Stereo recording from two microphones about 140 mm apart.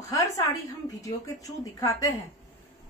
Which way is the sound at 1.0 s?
25° left (ahead or behind).